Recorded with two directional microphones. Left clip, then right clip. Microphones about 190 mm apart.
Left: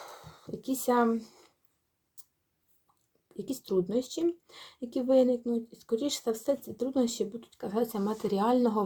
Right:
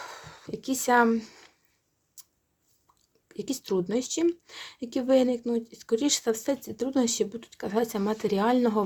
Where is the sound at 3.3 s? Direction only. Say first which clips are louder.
Right 2 dB; 35° right (ahead or behind).